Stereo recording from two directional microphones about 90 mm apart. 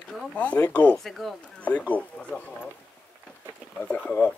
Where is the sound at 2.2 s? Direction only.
20° left (ahead or behind).